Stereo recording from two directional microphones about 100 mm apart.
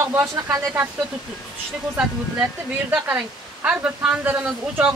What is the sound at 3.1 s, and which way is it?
Speech, 10° right (ahead or behind).